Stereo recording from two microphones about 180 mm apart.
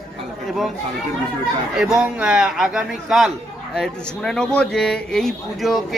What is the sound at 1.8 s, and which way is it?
Speech, 5° right (ahead or behind).